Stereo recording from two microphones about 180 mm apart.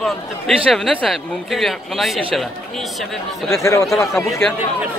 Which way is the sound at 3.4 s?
15° left (ahead or behind).